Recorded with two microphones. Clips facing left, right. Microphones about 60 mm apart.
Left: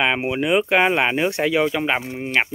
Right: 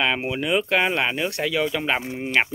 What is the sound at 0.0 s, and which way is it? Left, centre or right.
Speech, centre.